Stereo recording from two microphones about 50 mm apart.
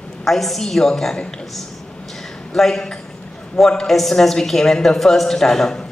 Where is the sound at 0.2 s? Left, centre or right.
Centre.